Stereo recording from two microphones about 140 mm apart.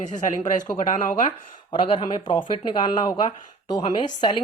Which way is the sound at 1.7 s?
35° left (ahead or behind).